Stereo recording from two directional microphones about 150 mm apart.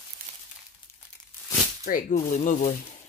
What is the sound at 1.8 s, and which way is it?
Speech, 65° left (ahead or behind).